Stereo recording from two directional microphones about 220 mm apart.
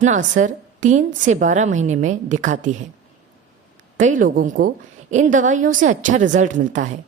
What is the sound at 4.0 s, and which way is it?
Speech, 35° right (ahead or behind).